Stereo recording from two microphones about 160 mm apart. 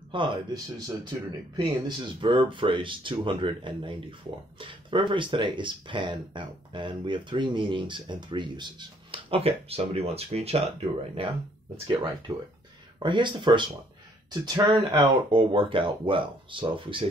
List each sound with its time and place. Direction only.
0.1 s speech: 30° right (ahead or behind)